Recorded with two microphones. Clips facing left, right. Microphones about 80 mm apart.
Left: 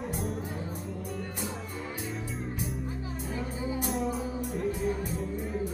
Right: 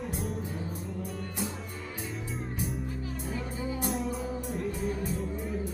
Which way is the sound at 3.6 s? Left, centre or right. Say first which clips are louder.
Left 2 dB; centre.